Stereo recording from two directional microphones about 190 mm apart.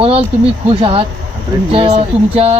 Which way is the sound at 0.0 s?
30° right (ahead or behind).